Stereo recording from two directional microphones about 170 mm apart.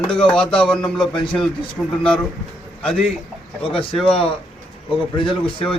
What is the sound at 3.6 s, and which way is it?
A man's voice, 35° left (ahead or behind).